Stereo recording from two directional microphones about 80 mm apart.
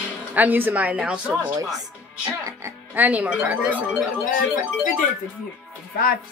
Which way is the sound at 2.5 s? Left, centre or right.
Right.